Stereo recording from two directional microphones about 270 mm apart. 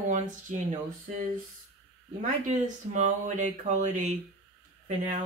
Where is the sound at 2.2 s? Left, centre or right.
Right.